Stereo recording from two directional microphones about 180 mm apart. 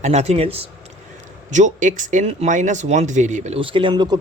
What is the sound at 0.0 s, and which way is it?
Speech, 35° right (ahead or behind).